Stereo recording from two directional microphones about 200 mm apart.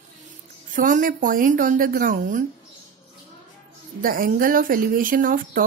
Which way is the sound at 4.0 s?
45° right (ahead or behind).